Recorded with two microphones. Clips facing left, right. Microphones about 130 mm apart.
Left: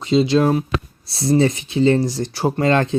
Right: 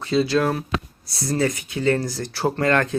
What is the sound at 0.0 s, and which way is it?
Speech, 20° left (ahead or behind).